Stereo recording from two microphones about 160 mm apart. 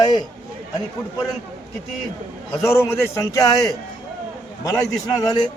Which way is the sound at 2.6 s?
15° left (ahead or behind).